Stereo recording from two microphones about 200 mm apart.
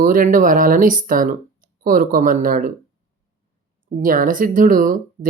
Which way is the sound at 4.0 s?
45° right (ahead or behind).